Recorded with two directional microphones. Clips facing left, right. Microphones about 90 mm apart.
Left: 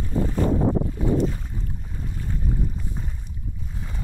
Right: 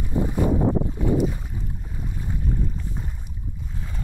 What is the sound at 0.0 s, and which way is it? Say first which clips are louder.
Boat: even; 15° right (ahead or behind).